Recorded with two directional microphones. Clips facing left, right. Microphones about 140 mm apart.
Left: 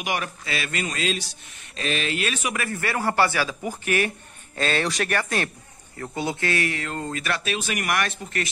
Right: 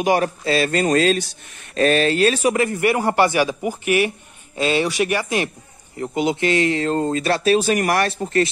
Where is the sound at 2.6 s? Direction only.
20° right (ahead or behind).